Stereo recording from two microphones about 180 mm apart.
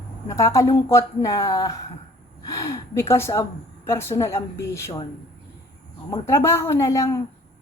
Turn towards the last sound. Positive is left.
turn(degrees=15)  # may be behind; listen again after turning